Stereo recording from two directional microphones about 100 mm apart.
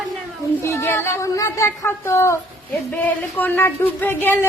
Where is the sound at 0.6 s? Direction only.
25° left (ahead or behind).